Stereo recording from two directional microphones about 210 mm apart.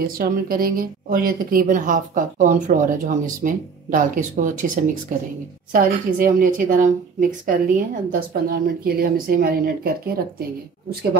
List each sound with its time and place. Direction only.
0.0 s a woman's voice: 45° right (ahead or behind)
5.7 s a woman's voice: 40° right (ahead or behind)